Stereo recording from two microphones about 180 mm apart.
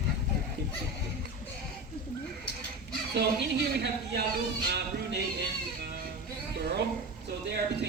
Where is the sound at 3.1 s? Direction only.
65° right (ahead or behind).